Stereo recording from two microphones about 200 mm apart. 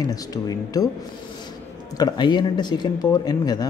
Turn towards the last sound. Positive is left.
turn(degrees=20)  # may be behind; listen again after turning